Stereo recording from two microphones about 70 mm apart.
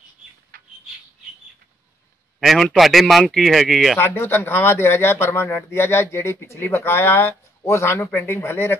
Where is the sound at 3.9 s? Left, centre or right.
Left.